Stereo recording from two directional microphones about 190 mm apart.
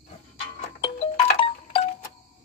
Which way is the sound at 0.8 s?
30° left (ahead or behind).